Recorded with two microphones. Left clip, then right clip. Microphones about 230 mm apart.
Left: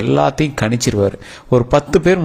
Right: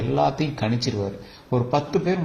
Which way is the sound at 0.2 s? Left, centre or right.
Left.